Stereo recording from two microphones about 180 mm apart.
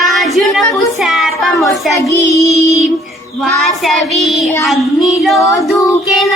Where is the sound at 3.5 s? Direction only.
Centre (ahead or behind).